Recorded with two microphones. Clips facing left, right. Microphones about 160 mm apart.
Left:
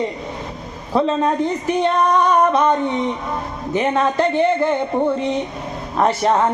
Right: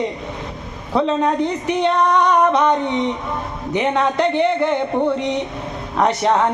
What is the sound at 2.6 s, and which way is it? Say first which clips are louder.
Speech: even; 20° right (ahead or behind).